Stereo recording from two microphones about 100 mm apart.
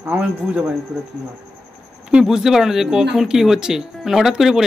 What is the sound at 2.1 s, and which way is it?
Speech, 5° right (ahead or behind).